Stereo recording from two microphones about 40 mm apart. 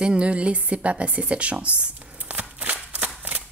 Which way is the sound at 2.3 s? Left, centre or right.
Right.